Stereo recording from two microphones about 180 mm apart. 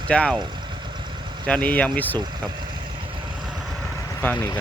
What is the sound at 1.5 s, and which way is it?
Speech, 10° left (ahead or behind).